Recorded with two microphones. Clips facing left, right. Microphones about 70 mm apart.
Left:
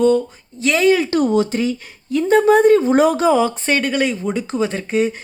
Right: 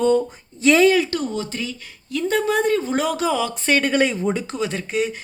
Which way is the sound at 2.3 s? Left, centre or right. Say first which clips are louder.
Left 9 dB; left.